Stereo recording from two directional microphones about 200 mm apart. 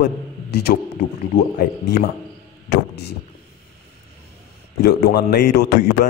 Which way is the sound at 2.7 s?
55° left (ahead or behind).